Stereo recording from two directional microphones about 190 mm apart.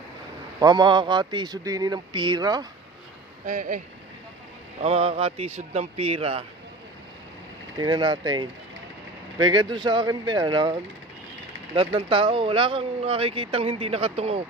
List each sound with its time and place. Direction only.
0.6 s speech: 20° right (ahead or behind)
3.4 s speech: 45° right (ahead or behind)
4.8 s speech: 30° right (ahead or behind)
7.8 s speech: 25° right (ahead or behind)